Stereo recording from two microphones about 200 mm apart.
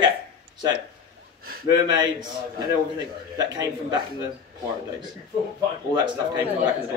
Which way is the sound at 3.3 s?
20° right (ahead or behind).